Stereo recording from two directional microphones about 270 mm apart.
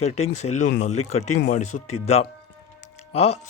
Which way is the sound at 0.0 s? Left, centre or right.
Left.